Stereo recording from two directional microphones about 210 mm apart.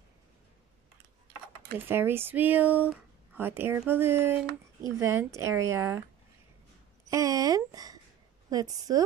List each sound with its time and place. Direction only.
1.9 s speech: 10° right (ahead or behind)
7.1 s a sound: 15° right (ahead or behind)
8.5 s speech: 15° right (ahead or behind)